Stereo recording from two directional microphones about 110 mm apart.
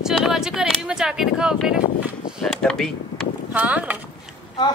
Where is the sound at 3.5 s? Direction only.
15° right (ahead or behind).